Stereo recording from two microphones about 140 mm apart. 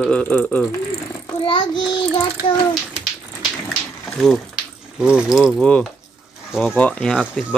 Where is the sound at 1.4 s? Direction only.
35° left (ahead or behind).